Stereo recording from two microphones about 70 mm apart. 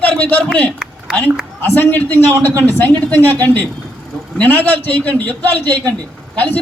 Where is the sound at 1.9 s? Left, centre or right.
Left.